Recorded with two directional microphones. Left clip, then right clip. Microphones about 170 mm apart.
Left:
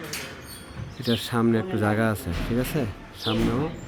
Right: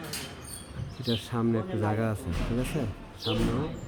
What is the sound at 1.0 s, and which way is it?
Speech, 25° left (ahead or behind).